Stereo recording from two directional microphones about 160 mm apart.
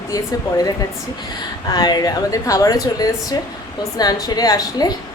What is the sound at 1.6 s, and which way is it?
A woman's voice, 25° left (ahead or behind).